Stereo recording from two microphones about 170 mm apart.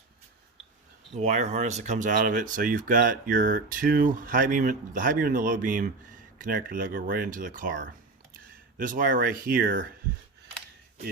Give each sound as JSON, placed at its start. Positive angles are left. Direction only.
{"t": 1.1, "sound": "speech", "side_deg": -45}